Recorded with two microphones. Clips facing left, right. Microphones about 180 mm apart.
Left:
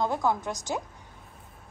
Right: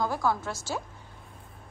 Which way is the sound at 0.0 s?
20° left (ahead or behind).